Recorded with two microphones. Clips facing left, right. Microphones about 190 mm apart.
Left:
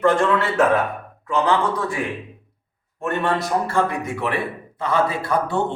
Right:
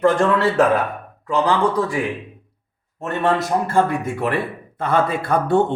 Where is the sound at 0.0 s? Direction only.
35° right (ahead or behind).